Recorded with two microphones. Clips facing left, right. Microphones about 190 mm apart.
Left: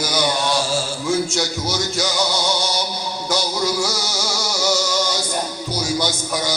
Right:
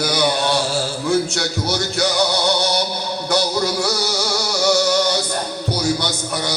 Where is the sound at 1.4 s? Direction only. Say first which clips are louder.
Right 1 dB; 60° right (ahead or behind).